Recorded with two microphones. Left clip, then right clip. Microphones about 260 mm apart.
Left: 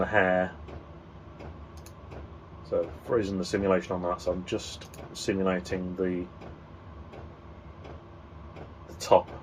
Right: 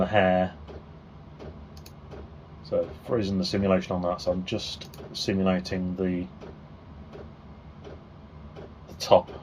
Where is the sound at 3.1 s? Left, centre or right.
Right.